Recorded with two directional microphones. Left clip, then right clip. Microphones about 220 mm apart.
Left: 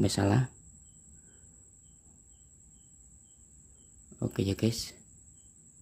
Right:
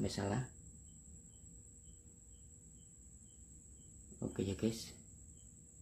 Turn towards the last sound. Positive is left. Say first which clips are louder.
# left 8 dB
turn(degrees=35)  # may be behind; listen again after turning